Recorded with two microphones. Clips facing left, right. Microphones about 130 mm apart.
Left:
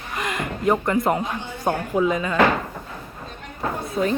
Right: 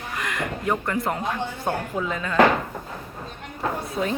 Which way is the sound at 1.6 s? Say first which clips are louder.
Left 7 dB; 15° left (ahead or behind).